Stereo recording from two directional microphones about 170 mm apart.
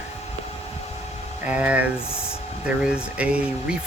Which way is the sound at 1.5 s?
10° right (ahead or behind).